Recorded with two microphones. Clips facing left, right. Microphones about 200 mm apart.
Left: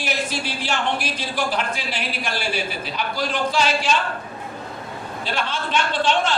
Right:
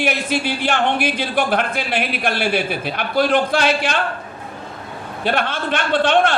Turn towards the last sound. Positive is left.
turn(degrees=-60)  # may be behind; listen again after turning